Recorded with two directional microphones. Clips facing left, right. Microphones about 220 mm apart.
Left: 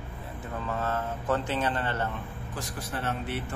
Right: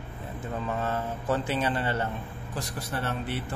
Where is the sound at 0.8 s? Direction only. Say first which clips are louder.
Right 1 dB; 10° right (ahead or behind).